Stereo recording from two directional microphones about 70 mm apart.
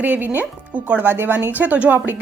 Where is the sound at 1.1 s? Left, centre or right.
Right.